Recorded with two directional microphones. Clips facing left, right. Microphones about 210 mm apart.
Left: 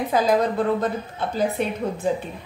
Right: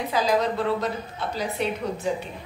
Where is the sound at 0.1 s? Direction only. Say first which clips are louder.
Left 3 dB; 50° left (ahead or behind).